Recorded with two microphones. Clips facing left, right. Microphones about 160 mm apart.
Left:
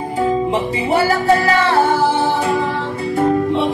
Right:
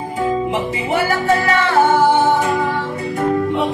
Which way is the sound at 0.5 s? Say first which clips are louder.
Left 2 dB; 35° left (ahead or behind).